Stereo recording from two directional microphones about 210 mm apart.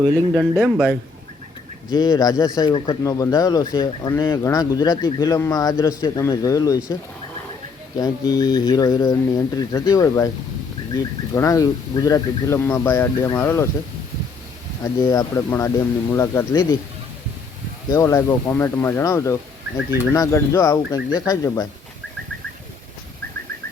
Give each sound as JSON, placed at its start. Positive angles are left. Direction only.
{"t": 0.0, "sound": "speech", "side_deg": -15}
{"t": 0.6, "sound": "a man's voice", "side_deg": -5}
{"t": 1.9, "sound": "speech", "side_deg": 15}
{"t": 7.9, "sound": "speech", "side_deg": 15}
{"t": 15.0, "sound": "speech", "side_deg": 15}
{"t": 17.8, "sound": "speech", "side_deg": 15}